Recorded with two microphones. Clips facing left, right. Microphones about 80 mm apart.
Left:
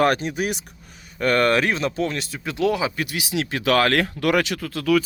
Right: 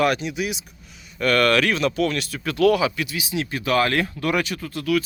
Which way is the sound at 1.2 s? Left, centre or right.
Left.